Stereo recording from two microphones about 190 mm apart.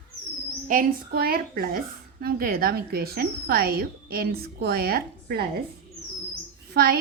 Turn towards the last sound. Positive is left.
turn(degrees=-55)  # may be behind; listen again after turning